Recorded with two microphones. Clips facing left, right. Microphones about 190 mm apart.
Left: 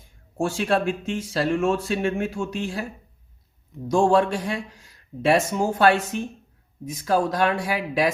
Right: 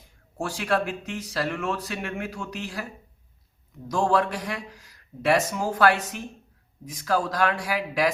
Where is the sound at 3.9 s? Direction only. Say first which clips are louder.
Left 5 dB; 25° left (ahead or behind).